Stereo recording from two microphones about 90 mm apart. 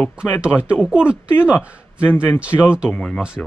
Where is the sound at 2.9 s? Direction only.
10° left (ahead or behind).